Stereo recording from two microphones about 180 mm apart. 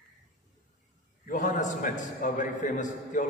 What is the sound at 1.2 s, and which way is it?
A man's voice, 45° left (ahead or behind).